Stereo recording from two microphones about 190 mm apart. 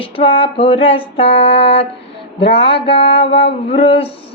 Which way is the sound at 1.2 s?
70° left (ahead or behind).